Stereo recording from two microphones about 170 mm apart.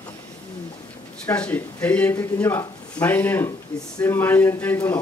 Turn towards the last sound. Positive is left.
turn(degrees=10)  # may be behind; listen again after turning